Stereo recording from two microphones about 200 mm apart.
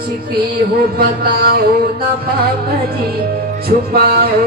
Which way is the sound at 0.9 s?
50° right (ahead or behind).